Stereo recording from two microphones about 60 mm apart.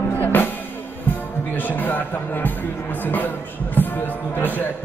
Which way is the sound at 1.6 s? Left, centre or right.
Left.